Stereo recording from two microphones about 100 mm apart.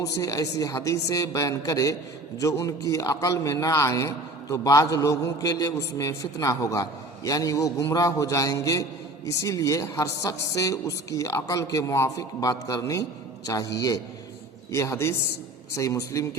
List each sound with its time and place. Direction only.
0.0 s a man's voice: 35° left (ahead or behind)
14.7 s a man's voice: 30° left (ahead or behind)